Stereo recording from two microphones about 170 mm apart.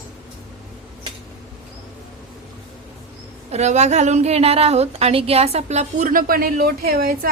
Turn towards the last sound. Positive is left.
turn(degrees=-65)  # may be behind; listen again after turning